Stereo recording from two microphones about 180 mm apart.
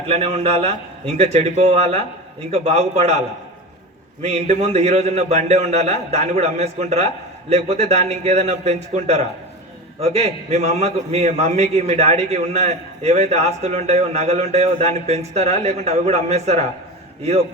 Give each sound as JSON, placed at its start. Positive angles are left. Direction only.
{"t": 0.1, "sound": "a man's voice", "side_deg": -35}
{"t": 4.2, "sound": "a man's voice", "side_deg": -40}